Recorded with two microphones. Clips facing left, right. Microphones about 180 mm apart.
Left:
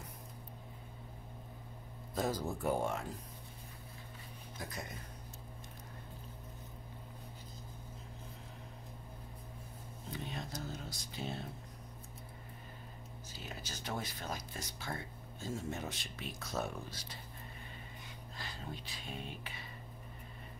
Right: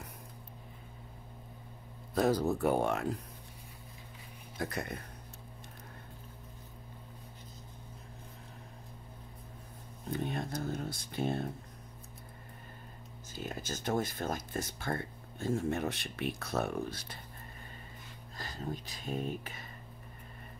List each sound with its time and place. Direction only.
2.1 s speech: 70° right (ahead or behind)
4.6 s speech: 65° right (ahead or behind)
10.1 s speech: 55° right (ahead or behind)
13.3 s speech: 50° right (ahead or behind)
18.4 s speech: 45° right (ahead or behind)